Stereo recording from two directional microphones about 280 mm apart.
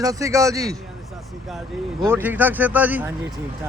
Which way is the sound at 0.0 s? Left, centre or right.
Centre.